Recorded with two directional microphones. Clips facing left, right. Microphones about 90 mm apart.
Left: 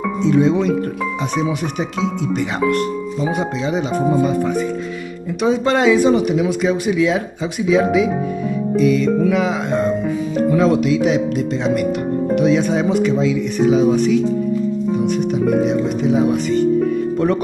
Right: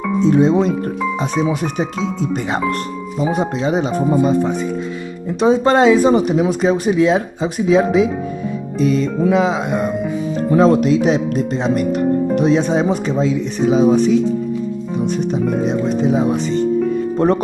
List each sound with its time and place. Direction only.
0.2 s speech: 40° right (ahead or behind)
3.3 s speech: 40° right (ahead or behind)
5.4 s speech: 35° right (ahead or behind)
9.7 s speech: 15° right (ahead or behind)
10.3 s speech: 35° right (ahead or behind)
15.9 s speech: 35° right (ahead or behind)